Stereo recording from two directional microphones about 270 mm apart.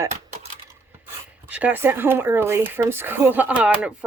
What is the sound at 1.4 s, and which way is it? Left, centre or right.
Speech, centre.